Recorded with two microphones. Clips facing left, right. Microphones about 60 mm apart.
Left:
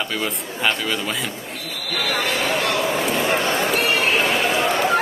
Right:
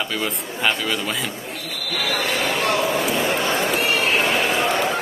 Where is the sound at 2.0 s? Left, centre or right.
Left.